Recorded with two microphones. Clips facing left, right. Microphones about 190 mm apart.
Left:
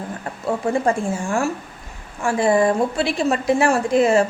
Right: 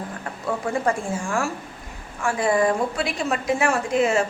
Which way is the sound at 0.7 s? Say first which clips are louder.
Left 4 dB; 25° left (ahead or behind).